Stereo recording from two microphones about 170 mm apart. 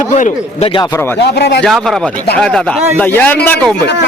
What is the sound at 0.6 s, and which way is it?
Speech, 30° left (ahead or behind).